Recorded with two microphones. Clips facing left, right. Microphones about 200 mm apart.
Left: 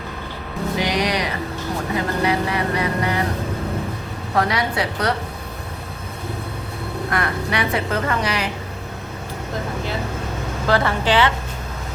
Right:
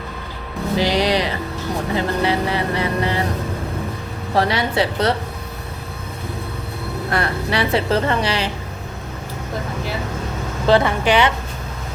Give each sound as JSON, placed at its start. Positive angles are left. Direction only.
{"t": 0.8, "sound": "music", "side_deg": -30}
{"t": 2.0, "sound": "vehicle", "side_deg": -30}
{"t": 4.4, "sound": "a woman's voice", "side_deg": -30}
{"t": 7.1, "sound": "a sound", "side_deg": -30}
{"t": 10.7, "sound": "a woman's voice", "side_deg": -20}